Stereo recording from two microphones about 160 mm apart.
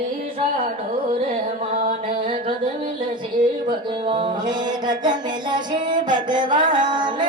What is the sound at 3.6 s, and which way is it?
Music, 30° right (ahead or behind).